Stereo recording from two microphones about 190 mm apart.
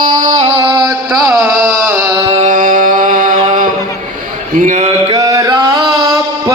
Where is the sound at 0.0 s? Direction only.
45° right (ahead or behind).